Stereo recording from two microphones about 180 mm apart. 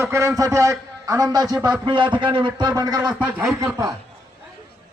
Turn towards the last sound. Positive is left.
turn(degrees=-15)  # may be behind; listen again after turning